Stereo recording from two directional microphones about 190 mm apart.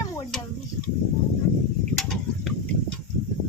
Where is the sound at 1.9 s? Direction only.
Centre (ahead or behind).